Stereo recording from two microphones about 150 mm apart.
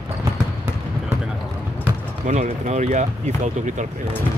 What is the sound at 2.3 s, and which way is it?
Speech, 50° right (ahead or behind).